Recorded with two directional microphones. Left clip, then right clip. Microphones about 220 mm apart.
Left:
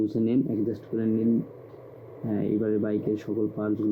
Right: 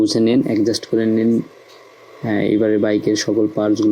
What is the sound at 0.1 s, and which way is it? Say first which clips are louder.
Speech: right 11 dB; 20° right (ahead or behind).